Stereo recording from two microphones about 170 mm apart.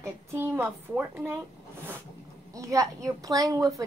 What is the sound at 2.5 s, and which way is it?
A woman's voice, 20° right (ahead or behind).